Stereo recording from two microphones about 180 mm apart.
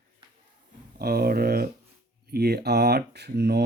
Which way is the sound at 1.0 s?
60° right (ahead or behind).